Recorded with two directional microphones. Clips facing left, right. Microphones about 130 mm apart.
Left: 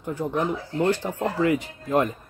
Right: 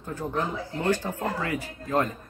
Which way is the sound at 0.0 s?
15° left (ahead or behind).